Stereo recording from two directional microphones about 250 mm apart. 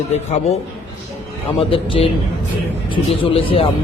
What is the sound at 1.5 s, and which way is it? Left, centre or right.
Speech, left.